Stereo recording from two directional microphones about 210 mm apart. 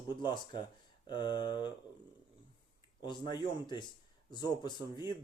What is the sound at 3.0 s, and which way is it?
Speech, 20° left (ahead or behind).